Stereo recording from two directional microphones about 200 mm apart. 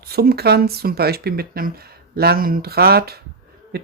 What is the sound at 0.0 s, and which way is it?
Speech, 50° right (ahead or behind).